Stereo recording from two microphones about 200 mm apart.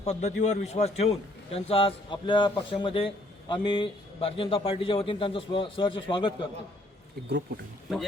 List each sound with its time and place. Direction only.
0.0 s a man's voice: 35° left (ahead or behind)
7.3 s speech: 55° right (ahead or behind)